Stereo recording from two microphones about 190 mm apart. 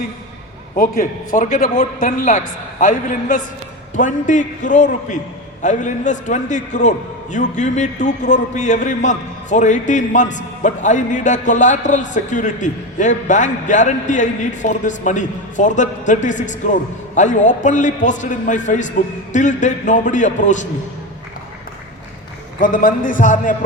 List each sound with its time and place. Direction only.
0.8 s a man's voice: 45° left (ahead or behind)
22.6 s a man's voice: 45° left (ahead or behind)